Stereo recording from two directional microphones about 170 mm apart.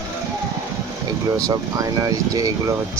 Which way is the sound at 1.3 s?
20° right (ahead or behind).